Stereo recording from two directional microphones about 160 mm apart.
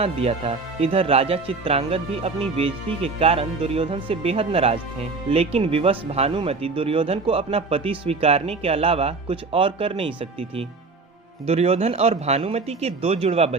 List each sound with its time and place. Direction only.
0.0 s speech: 40° right (ahead or behind)